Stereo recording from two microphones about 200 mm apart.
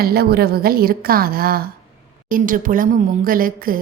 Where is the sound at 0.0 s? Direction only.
50° right (ahead or behind).